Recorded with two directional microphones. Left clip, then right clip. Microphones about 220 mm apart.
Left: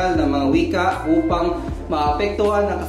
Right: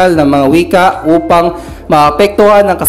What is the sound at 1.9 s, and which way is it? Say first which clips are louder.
Speech: right 13 dB; 40° right (ahead or behind).